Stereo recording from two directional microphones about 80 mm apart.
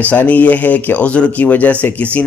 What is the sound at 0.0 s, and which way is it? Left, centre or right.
A man's voice, centre.